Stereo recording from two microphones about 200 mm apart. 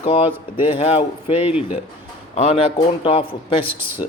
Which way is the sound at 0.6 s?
30° left (ahead or behind).